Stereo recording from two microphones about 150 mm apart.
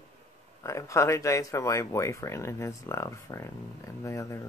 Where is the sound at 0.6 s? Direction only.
20° left (ahead or behind).